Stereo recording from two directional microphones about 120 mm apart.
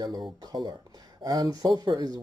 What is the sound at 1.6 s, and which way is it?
Speech, 35° right (ahead or behind).